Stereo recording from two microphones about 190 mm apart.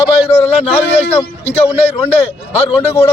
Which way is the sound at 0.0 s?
30° left (ahead or behind).